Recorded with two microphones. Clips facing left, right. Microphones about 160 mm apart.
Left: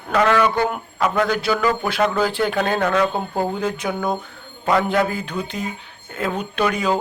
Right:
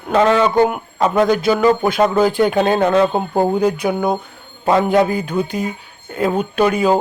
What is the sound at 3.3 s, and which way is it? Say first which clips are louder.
Speech: right 7 dB; 45° right (ahead or behind).